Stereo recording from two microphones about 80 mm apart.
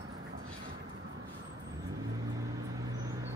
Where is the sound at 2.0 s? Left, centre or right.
Right.